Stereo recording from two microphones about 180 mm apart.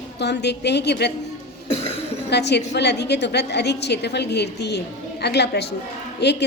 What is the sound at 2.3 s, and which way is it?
A woman's voice, 70° left (ahead or behind).